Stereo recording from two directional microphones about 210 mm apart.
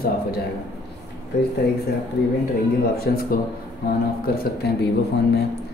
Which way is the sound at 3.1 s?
45° left (ahead or behind).